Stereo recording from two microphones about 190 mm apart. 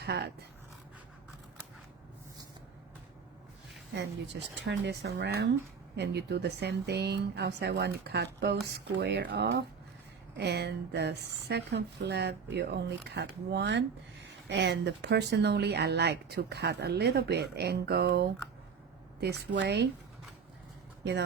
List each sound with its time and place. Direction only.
0.0 s speech: 60° right (ahead or behind)
3.9 s speech: 65° right (ahead or behind)